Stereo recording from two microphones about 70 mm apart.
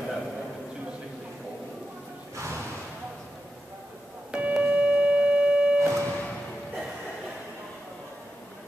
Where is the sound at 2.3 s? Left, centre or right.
Right.